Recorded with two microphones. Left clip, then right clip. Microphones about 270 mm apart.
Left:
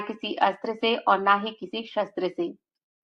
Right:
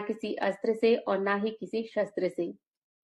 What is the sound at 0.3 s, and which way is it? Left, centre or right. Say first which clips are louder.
A woman's voice: left 5 dB; right.